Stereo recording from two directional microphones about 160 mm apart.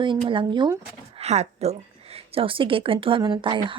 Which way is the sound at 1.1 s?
45° right (ahead or behind).